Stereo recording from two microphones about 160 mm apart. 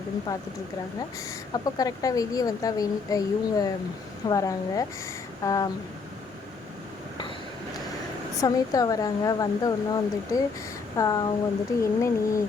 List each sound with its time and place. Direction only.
0.3 s speech: 20° left (ahead or behind)
1.5 s speech: 20° left (ahead or behind)
8.4 s speech: 20° left (ahead or behind)